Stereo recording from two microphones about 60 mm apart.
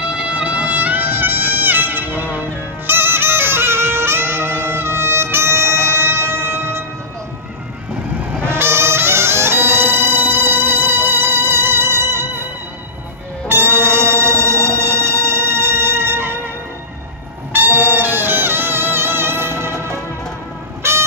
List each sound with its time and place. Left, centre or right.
0.0 s music: centre; by 6.8 s right
8.5 s music: right
13.5 s brass instrument: right
17.5 s brass instrument: right
17.9 s music: right